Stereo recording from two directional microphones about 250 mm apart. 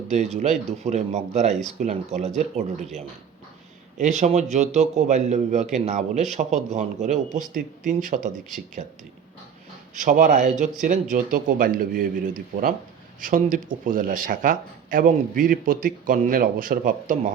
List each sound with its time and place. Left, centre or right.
0.1 s a man's voice: right
3.9 s a man's voice: right
9.9 s speech: right